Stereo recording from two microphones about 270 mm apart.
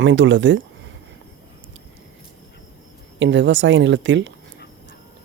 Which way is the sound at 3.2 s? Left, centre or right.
Right.